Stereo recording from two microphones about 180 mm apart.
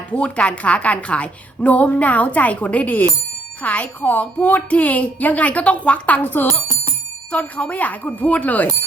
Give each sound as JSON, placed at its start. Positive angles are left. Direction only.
{"t": 0.1, "sound": "a woman's voice", "side_deg": 5}